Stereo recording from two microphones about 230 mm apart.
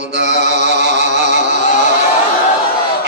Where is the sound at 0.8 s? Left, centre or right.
Right.